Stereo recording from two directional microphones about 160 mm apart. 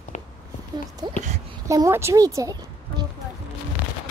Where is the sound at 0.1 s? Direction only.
50° left (ahead or behind).